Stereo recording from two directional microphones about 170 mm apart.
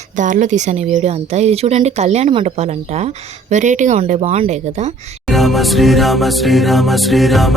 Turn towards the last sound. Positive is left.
turn(degrees=0)  # may be behind; listen again after turning